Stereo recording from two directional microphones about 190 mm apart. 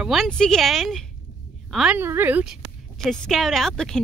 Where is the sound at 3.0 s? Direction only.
Centre (ahead or behind).